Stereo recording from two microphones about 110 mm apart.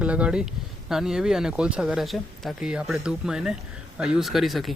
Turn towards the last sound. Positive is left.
turn(degrees=0)  # may be behind; listen again after turning